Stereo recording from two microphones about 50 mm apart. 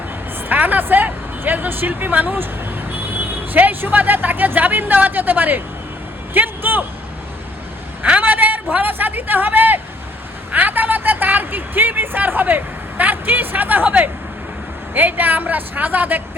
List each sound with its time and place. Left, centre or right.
0.4 s a man's voice: right
8.2 s a sound: right
8.7 s speech: right